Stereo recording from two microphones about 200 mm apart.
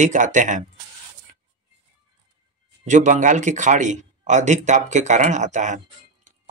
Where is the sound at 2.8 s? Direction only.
40° right (ahead or behind).